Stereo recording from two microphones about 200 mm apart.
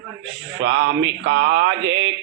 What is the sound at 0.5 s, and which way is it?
Mantra, 70° right (ahead or behind).